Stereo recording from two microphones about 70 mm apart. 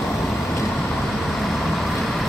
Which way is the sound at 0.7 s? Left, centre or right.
Centre.